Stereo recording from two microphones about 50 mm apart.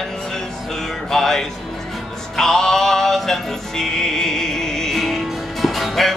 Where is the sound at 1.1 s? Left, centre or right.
Centre.